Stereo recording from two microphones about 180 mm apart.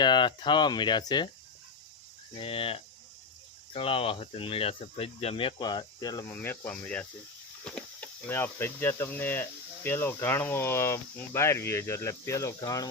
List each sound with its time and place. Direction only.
0.0 s speech: 25° left (ahead or behind)
2.3 s speech: 30° left (ahead or behind)
6.3 s speech: 10° left (ahead or behind)